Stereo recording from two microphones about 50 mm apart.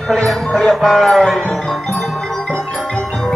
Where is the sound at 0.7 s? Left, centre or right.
Centre.